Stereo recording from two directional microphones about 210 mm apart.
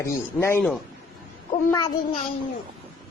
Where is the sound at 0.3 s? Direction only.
10° left (ahead or behind).